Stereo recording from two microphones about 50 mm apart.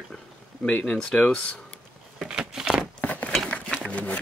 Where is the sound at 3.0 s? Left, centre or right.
Left.